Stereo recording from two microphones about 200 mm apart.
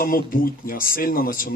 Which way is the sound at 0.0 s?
45° left (ahead or behind).